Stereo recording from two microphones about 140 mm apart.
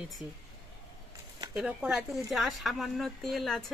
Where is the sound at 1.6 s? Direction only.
5° right (ahead or behind).